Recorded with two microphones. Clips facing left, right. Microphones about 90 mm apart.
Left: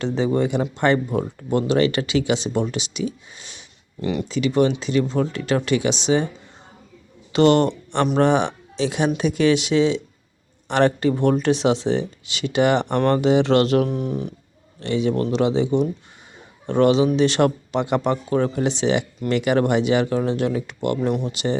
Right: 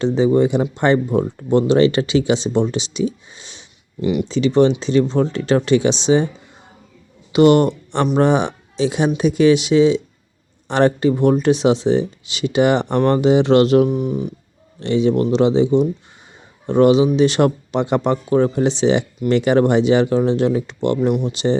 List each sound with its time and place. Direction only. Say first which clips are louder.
0.0 s speech: right 6 dB; 15° right (ahead or behind)
4.0 s speech: right 5 dB; 15° right (ahead or behind)
4.3 s speech: right 4 dB; 25° right (ahead or behind)
7.3 s speech: right 4 dB; 15° right (ahead or behind)
13.8 s speech: right 5 dB; 5° right (ahead or behind)
14.8 s speech: right 5 dB; 25° right (ahead or behind)